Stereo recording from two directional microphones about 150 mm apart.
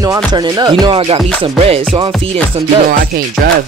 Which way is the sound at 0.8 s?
35° right (ahead or behind).